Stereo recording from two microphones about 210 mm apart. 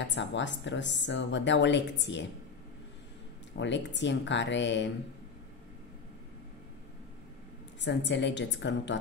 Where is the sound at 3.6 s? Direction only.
60° left (ahead or behind).